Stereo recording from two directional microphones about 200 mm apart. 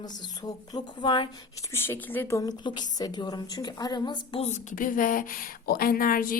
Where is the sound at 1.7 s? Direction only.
10° left (ahead or behind).